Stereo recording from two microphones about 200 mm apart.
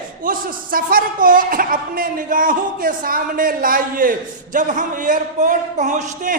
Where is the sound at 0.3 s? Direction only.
45° right (ahead or behind).